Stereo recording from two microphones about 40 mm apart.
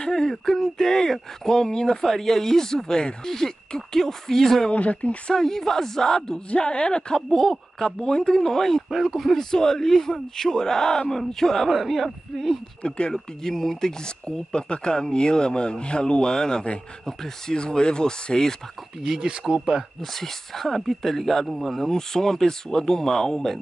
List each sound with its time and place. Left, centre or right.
0.0 s speech: centre
4.6 s speech: left
5.3 s speech: centre
6.5 s speech: left
7.2 s speech: centre
9.5 s speech: centre
12.8 s speech: left
13.1 s speech: centre
19.0 s speech: centre
20.0 s speech: centre